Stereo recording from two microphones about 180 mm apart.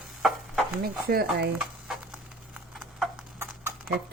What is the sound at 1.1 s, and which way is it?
Speech, 55° right (ahead or behind).